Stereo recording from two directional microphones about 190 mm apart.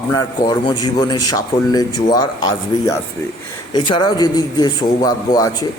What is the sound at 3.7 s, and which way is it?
A man's voice, 25° left (ahead or behind).